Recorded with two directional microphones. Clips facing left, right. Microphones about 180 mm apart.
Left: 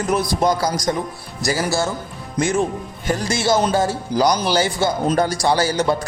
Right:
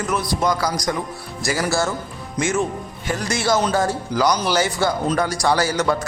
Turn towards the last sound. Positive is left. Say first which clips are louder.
# left 1 dB
turn(degrees=30)  # may be behind; listen again after turning